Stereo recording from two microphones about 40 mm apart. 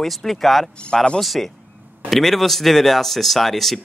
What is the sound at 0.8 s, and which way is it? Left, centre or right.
Speech, left.